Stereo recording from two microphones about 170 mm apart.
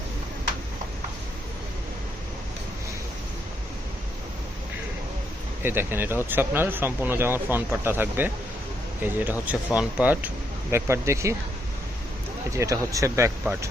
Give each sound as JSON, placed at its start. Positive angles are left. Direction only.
{"t": 5.6, "sound": "speech", "side_deg": -15}
{"t": 12.5, "sound": "speech", "side_deg": -20}